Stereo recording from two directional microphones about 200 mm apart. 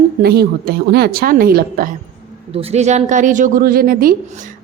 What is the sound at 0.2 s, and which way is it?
A woman's voice, 50° right (ahead or behind).